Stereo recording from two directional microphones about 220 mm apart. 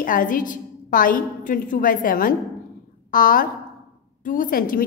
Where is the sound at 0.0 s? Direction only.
40° left (ahead or behind).